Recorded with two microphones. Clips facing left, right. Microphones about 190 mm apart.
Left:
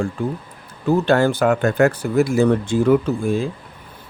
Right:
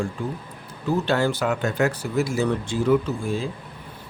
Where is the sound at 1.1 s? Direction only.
50° left (ahead or behind).